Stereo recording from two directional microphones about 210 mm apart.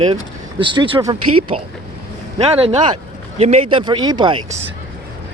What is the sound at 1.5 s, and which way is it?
Speech, 30° right (ahead or behind).